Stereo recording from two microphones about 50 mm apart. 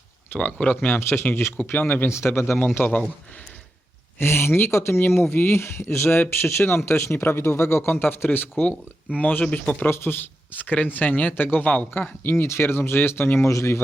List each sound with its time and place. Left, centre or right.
0.3 s speech: left
0.9 s speech: left
1.7 s speech: left
2.0 s speech: left
2.6 s speech: left
4.2 s speech: left
4.7 s speech: left
8.6 s speech: left
9.8 s speech: left
11.9 s speech: left
13.5 s a man's voice: left